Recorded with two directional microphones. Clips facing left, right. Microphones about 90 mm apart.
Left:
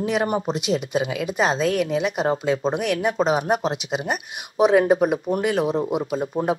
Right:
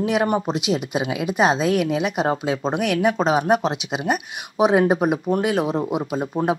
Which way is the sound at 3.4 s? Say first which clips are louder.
Right 3 dB; 35° right (ahead or behind).